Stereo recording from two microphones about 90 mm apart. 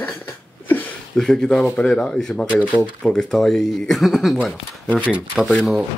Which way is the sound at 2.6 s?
20° right (ahead or behind).